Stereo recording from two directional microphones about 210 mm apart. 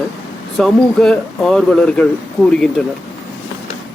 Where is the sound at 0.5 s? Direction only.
Centre (ahead or behind).